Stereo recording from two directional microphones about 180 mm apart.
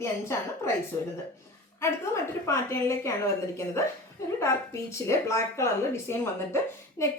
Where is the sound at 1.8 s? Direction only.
15° left (ahead or behind).